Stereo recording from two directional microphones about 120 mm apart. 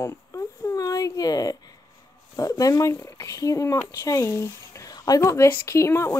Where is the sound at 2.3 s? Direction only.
30° left (ahead or behind).